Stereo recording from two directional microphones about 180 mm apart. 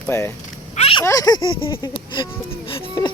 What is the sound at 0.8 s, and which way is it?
Speech, 30° left (ahead or behind).